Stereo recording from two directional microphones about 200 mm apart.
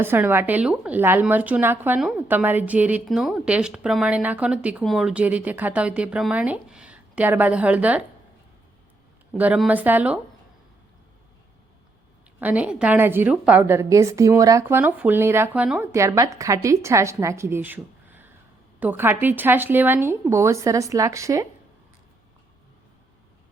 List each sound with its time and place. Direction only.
0.0 s a woman's voice: 10° right (ahead or behind)
9.3 s a woman's voice: 5° right (ahead or behind)
12.4 s a woman's voice: 10° right (ahead or behind)